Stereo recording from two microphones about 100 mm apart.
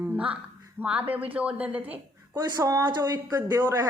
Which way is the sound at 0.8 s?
20° right (ahead or behind).